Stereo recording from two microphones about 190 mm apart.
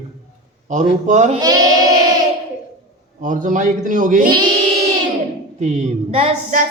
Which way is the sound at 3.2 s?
45° right (ahead or behind).